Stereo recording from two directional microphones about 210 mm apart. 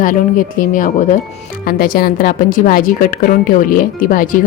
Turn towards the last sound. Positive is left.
turn(degrees=40)  # may be behind; listen again after turning